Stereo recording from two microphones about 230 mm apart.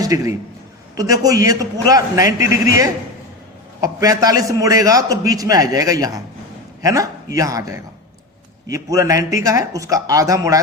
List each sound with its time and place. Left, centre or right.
0.0 s a man's voice: centre